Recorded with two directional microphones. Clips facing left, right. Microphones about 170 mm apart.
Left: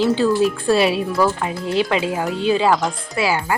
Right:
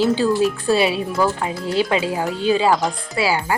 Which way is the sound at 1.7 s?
30° right (ahead or behind).